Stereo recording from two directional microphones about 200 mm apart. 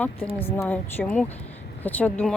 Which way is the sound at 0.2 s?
30° left (ahead or behind).